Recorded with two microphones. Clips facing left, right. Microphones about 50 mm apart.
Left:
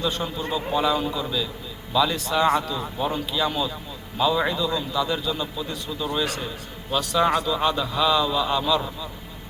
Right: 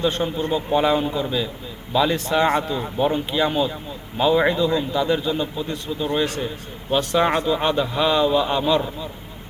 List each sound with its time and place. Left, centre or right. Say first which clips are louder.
0.0 s a man's voice: right 5 dB; right